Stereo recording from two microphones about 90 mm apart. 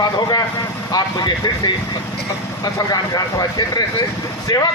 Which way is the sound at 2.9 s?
45° left (ahead or behind).